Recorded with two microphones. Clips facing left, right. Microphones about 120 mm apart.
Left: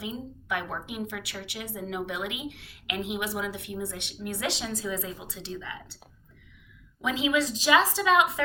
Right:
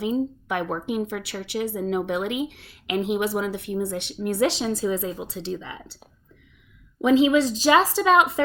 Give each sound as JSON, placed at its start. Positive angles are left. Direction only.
{"t": 0.0, "sound": "a woman's voice", "side_deg": -35}
{"t": 7.0, "sound": "a woman's voice", "side_deg": -35}